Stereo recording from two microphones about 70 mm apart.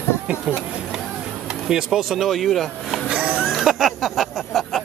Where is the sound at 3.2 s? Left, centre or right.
Centre.